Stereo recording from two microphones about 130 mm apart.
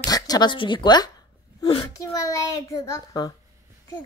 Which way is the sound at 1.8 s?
25° left (ahead or behind).